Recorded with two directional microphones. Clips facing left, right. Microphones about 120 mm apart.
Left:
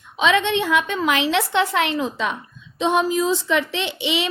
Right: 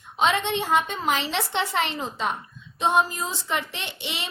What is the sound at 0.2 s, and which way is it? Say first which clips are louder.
A woman's voice: left 4 dB; 90° left.